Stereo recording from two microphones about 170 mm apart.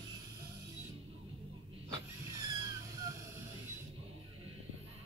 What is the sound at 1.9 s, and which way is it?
Vehicle, 20° right (ahead or behind).